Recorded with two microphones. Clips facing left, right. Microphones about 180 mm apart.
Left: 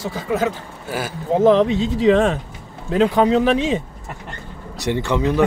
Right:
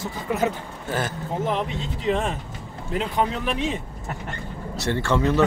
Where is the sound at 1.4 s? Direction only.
90° left.